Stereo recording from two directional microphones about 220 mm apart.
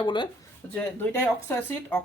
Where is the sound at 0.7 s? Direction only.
10° left (ahead or behind).